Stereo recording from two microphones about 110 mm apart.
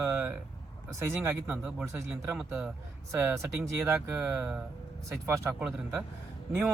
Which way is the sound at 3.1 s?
25° right (ahead or behind).